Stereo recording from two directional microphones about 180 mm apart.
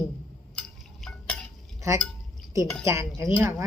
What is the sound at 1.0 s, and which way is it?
Stir, 5° left (ahead or behind).